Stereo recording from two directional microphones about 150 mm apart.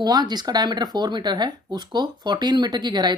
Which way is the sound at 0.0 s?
30° right (ahead or behind).